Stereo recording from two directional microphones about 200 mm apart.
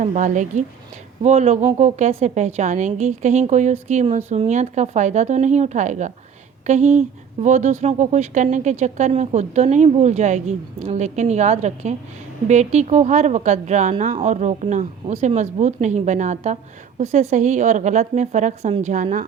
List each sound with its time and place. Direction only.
0.0 s a woman's voice: 40° right (ahead or behind)